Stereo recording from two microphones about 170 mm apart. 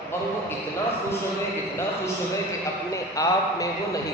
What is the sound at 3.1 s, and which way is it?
Speech, 20° left (ahead or behind).